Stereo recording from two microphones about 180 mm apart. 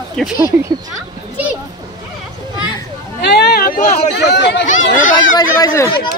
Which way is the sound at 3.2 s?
65° left (ahead or behind).